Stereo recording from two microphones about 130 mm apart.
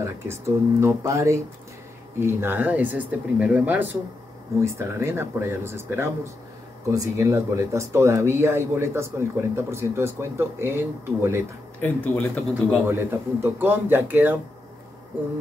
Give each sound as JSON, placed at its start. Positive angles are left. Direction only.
{"t": 0.0, "sound": "speech", "side_deg": -20}
{"t": 11.8, "sound": "speech", "side_deg": 15}
{"t": 12.8, "sound": "speech", "side_deg": -15}